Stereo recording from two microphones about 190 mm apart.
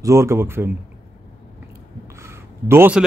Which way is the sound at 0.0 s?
15° right (ahead or behind).